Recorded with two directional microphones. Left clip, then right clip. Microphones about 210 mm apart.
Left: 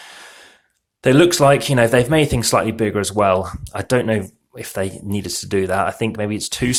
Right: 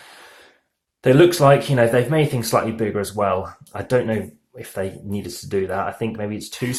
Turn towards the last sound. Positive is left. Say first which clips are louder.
# left 5 dB
turn(degrees=35)  # may be behind; listen again after turning